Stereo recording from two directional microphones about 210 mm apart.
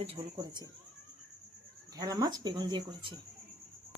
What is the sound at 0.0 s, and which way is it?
Speech, 25° right (ahead or behind).